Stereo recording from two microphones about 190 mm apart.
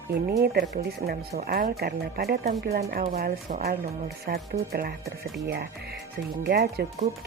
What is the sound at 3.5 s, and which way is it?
Speech, 40° right (ahead or behind).